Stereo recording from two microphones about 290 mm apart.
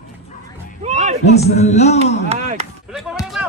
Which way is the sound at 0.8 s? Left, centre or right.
Right.